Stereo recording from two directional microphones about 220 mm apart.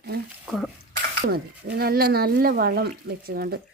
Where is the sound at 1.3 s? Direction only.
45° right (ahead or behind).